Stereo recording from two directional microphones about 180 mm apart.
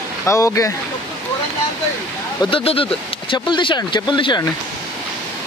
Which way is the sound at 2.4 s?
30° left (ahead or behind).